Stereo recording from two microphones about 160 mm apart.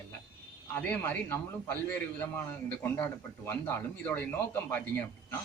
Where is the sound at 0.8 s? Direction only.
10° left (ahead or behind).